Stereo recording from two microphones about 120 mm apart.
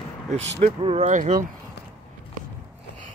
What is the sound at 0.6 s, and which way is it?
Speech, 85° right.